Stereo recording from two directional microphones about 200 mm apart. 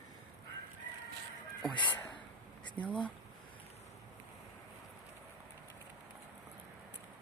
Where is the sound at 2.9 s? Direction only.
5° left (ahead or behind).